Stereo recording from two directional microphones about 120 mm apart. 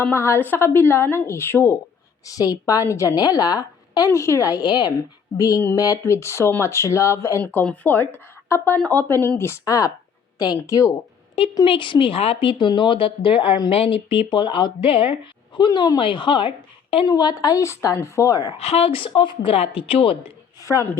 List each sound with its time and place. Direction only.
0.0 s a woman's voice: 20° left (ahead or behind)
7.4 s a woman's voice: 10° left (ahead or behind); by 10.9 s 25° left (ahead or behind)
11.6 s speech: 45° left (ahead or behind)
15.5 s a woman's voice: 40° left (ahead or behind)
18.6 s speech: 55° left (ahead or behind)
20.6 s a sound: 25° left (ahead or behind)